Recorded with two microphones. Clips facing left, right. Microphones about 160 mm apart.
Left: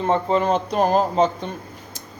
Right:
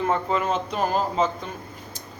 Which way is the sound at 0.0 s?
30° left (ahead or behind).